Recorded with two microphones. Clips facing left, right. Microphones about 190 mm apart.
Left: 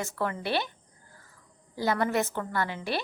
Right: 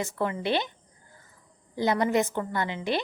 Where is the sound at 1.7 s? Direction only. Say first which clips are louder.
Right 3 dB; 20° right (ahead or behind).